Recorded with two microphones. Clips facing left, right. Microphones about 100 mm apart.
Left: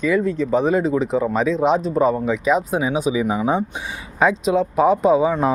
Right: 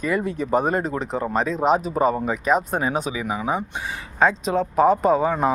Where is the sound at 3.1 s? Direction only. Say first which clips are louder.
Left 5 dB; 20° left (ahead or behind).